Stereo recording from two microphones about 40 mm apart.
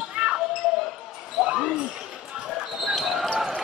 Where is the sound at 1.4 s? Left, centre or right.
Centre.